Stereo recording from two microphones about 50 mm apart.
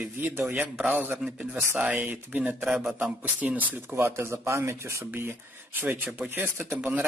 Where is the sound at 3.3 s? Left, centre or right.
Right.